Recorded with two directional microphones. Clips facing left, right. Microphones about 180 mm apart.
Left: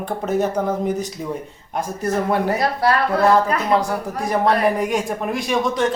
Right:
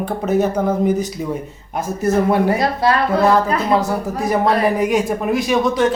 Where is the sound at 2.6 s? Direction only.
20° right (ahead or behind).